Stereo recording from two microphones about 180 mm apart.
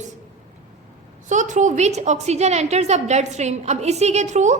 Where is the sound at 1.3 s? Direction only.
45° right (ahead or behind).